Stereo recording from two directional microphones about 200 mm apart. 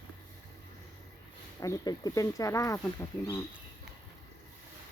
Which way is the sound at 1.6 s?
20° left (ahead or behind).